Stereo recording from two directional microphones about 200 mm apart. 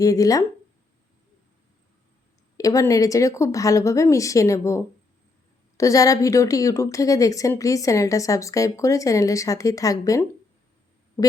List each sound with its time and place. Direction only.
0.0 s speech: 15° left (ahead or behind)
2.6 s speech: 15° left (ahead or behind)